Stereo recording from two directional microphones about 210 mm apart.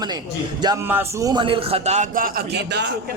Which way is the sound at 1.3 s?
25° right (ahead or behind).